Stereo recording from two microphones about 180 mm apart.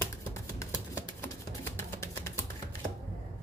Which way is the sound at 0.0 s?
20° left (ahead or behind).